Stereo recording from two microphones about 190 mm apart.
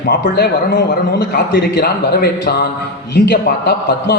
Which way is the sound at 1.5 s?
60° left (ahead or behind).